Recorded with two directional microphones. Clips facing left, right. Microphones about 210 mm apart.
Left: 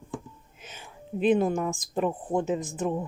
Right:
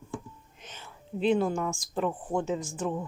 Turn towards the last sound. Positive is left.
turn(degrees=20)  # may be behind; listen again after turning